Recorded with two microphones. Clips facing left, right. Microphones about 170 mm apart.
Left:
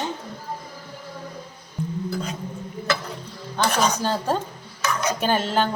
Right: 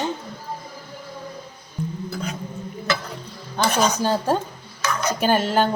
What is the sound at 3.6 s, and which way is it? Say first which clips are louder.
Speech: right 2 dB; centre (ahead or behind).